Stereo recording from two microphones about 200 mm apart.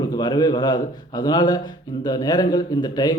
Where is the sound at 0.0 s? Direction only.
20° left (ahead or behind).